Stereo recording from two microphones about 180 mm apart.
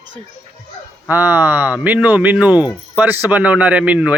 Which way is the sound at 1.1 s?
10° right (ahead or behind).